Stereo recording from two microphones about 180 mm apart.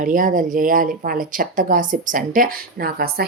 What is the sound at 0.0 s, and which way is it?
A woman's voice, 50° right (ahead or behind).